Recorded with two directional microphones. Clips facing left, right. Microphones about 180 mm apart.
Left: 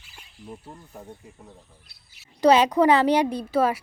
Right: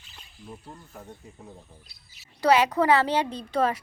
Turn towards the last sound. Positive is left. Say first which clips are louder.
# left 3 dB
turn(degrees=10)  # may be behind; listen again after turning